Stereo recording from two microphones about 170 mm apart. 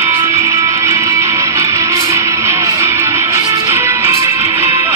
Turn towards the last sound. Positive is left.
turn(degrees=-15)  # may be behind; listen again after turning